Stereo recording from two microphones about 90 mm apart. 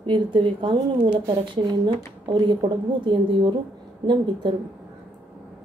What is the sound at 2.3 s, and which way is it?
A woman's voice, 60° right (ahead or behind).